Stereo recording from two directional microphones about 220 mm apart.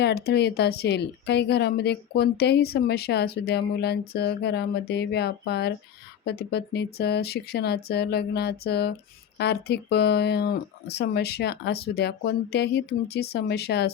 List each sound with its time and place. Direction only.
0.0 s a woman's voice: 45° left (ahead or behind)